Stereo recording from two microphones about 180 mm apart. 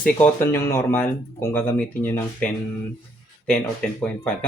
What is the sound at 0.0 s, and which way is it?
Speech, 10° left (ahead or behind).